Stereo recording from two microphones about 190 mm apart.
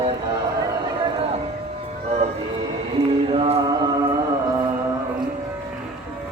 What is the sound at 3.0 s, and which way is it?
Mantra, 35° right (ahead or behind).